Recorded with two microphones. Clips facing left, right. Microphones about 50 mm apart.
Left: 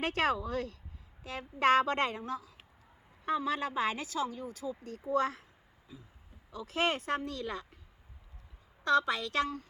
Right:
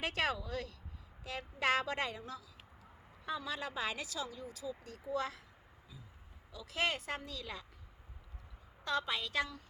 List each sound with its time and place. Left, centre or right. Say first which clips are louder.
0.0 s a woman's voice: left 5 dB; left
6.5 s a woman's voice: left 5 dB; left
8.8 s a woman's voice: left 8 dB; left